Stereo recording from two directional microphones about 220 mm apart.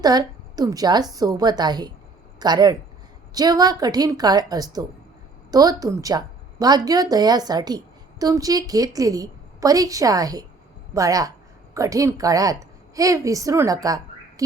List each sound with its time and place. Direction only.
0.0 s a woman's voice: 15° right (ahead or behind)